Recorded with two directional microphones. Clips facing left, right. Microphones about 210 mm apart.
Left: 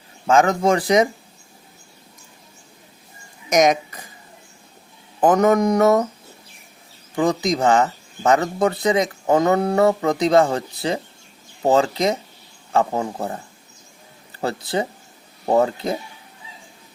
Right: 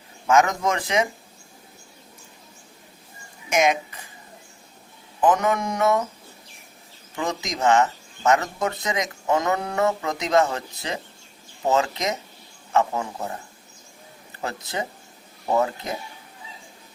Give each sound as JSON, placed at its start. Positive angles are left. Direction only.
{"t": 0.3, "sound": "speech", "side_deg": 30}
{"t": 3.5, "sound": "speech", "side_deg": 40}
{"t": 5.2, "sound": "speech", "side_deg": 40}
{"t": 7.2, "sound": "speech", "side_deg": 35}
{"t": 14.4, "sound": "speech", "side_deg": 30}